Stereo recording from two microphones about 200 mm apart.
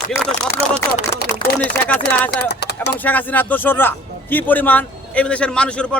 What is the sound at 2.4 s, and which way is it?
Speech, 55° left (ahead or behind).